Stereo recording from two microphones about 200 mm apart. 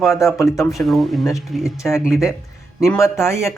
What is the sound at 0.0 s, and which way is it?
Speech, centre (ahead or behind).